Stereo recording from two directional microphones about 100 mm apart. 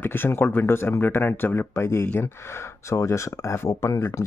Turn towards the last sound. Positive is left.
turn(degrees=30)  # may be behind; listen again after turning